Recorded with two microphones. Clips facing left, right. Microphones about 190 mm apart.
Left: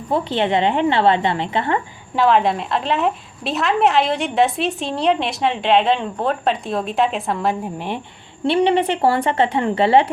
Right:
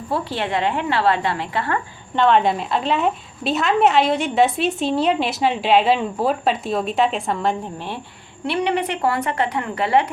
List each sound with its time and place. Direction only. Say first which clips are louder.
0.1 s a woman's voice: left 5 dB; 20° left (ahead or behind)
2.1 s a woman's voice: even; centre (ahead or behind)
8.4 s a woman's voice: left 5 dB; 30° left (ahead or behind)